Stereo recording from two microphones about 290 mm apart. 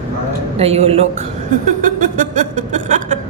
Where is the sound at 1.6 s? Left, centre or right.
Right.